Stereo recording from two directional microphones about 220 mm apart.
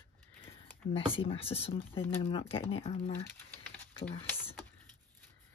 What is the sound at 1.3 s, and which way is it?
Speech, 25° left (ahead or behind).